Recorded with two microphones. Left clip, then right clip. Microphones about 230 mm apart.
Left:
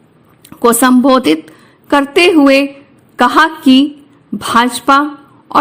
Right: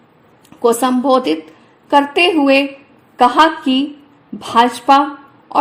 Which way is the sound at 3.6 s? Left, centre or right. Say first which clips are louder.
Left 8 dB; left.